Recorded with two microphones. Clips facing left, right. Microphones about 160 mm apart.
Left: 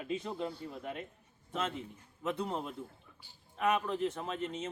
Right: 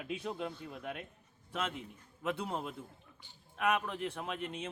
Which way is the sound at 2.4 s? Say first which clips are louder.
Left 2 dB; 5° right (ahead or behind).